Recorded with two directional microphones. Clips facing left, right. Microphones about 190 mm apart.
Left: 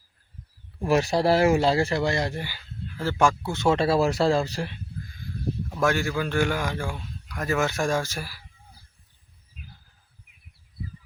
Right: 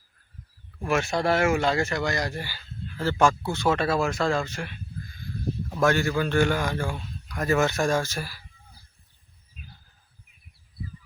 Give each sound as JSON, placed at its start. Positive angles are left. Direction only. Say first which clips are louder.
{"t": 0.9, "sound": "speech", "louder": "left 3 dB", "side_deg": 35}
{"t": 3.5, "sound": "speech", "louder": "left 2 dB", "side_deg": 25}
{"t": 5.7, "sound": "speech", "louder": "right 2 dB", "side_deg": 10}